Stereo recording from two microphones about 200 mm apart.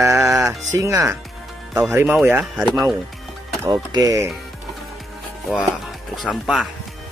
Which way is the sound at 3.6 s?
20° right (ahead or behind).